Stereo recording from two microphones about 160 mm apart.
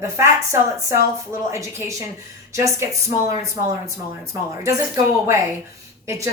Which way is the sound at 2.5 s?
20° right (ahead or behind).